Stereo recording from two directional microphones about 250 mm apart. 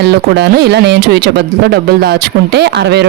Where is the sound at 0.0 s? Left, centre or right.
Right.